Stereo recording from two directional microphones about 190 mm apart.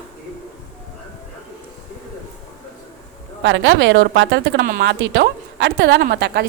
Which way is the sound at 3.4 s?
75° right (ahead or behind).